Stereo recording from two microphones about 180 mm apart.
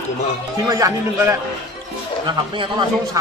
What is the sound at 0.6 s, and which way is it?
Speech, 20° right (ahead or behind).